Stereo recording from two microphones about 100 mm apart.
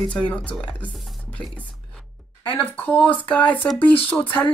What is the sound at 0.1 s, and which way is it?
Speech, 10° left (ahead or behind).